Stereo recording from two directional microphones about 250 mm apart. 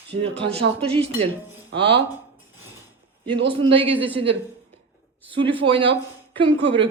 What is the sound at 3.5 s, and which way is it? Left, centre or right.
Speech, right.